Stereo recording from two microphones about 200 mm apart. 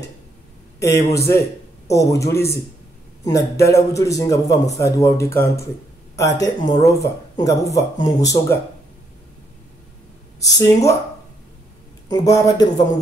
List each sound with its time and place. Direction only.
0.7 s speech: 15° left (ahead or behind)
10.4 s speech: 15° left (ahead or behind)
12.1 s speech: 15° left (ahead or behind)